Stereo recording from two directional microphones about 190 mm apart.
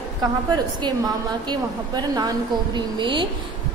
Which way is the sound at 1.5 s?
20° right (ahead or behind).